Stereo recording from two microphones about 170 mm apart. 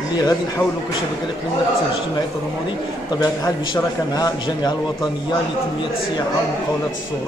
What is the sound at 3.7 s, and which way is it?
A man's voice, 20° left (ahead or behind).